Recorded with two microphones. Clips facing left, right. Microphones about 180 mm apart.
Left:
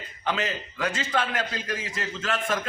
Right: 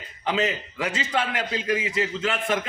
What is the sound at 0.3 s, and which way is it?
A man's voice, 15° right (ahead or behind).